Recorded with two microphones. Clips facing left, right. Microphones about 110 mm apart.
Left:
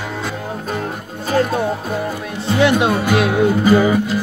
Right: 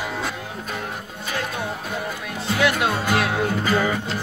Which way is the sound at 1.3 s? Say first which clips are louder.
Left 12 dB; 40° left (ahead or behind).